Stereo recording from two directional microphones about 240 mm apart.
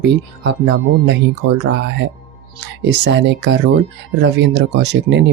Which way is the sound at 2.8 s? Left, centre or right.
Right.